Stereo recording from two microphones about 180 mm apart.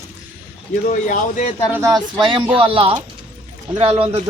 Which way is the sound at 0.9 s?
45° left (ahead or behind).